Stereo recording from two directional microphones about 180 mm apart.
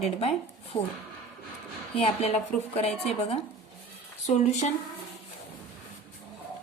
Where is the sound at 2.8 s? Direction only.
35° left (ahead or behind).